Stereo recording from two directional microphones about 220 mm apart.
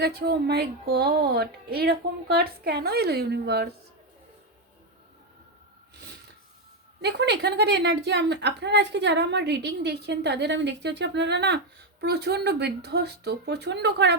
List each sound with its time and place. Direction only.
0.0 s a woman's voice: 45° right (ahead or behind)
7.0 s a woman's voice: 50° right (ahead or behind)